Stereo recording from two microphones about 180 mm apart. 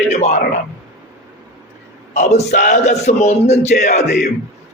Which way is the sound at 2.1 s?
40° left (ahead or behind).